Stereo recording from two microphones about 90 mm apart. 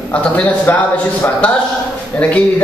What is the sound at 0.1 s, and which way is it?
Speech, 15° left (ahead or behind).